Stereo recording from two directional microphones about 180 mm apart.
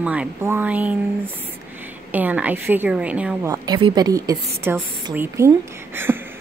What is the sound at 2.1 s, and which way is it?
A woman's voice, 10° right (ahead or behind).